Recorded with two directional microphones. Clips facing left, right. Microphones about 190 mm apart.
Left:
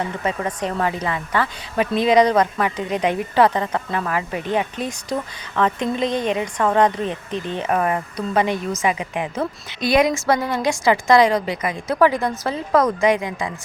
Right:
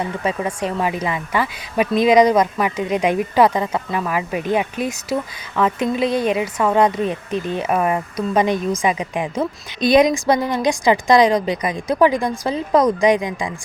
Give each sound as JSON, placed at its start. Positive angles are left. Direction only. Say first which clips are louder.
{"t": 0.2, "sound": "speech", "louder": "right 2 dB", "side_deg": -10}